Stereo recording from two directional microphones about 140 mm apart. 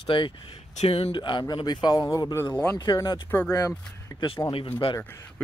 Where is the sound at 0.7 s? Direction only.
50° left (ahead or behind); by 3.8 s 20° left (ahead or behind).